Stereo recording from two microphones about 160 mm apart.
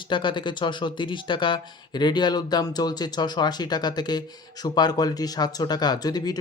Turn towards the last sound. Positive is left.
turn(degrees=25)  # may be behind; listen again after turning